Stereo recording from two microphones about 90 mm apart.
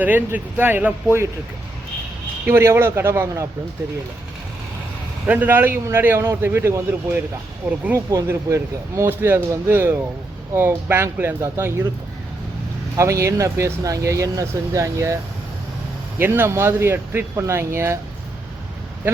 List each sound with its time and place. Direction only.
0.0 s a man's voice: 20° right (ahead or behind)
2.5 s a man's voice: 30° right (ahead or behind)
5.2 s a man's voice: 20° right (ahead or behind)
13.0 s speech: 35° right (ahead or behind)
16.2 s a man's voice: 25° right (ahead or behind)